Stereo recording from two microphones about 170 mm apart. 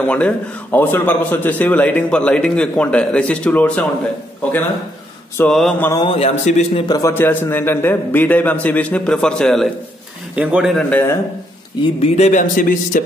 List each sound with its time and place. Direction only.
0.0 s a man's voice: 5° left (ahead or behind)
5.4 s mantra: 5° left (ahead or behind)
6.0 s a man's voice: 35° left (ahead or behind)
6.9 s a man's voice: 15° left (ahead or behind); by 10.7 s 5° right (ahead or behind)
10.8 s a man's voice: 10° left (ahead or behind)
11.8 s speech: 40° left (ahead or behind)